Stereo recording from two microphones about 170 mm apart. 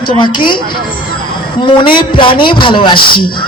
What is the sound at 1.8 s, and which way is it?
Speech, 30° left (ahead or behind).